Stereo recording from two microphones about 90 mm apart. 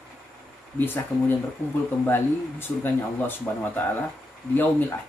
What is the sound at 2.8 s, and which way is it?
Speech, 20° left (ahead or behind).